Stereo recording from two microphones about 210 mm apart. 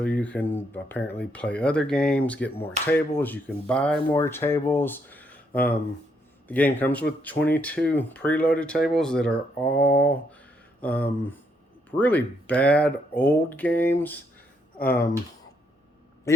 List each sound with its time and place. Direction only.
0.0 s speech: 5° left (ahead or behind)
9.6 s a sound: 50° left (ahead or behind)
10.8 s speech: 5° left (ahead or behind)
16.3 s speech: 15° left (ahead or behind)